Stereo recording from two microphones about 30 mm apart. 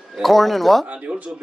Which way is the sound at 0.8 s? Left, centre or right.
Right.